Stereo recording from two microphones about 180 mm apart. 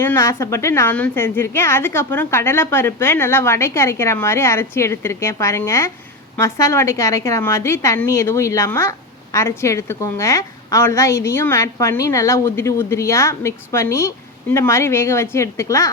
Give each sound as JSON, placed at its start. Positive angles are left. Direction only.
{"t": 0.0, "sound": "a woman's voice", "side_deg": 15}